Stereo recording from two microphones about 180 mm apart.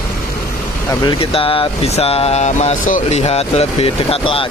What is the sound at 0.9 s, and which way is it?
Speech, 25° left (ahead or behind).